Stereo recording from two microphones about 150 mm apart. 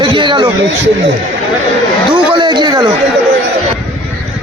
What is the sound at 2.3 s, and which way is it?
Speech, 30° right (ahead or behind).